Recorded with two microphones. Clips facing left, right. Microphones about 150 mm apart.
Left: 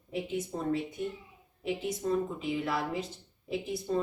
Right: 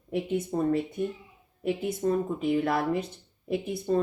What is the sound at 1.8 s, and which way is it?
Speech, 50° right (ahead or behind).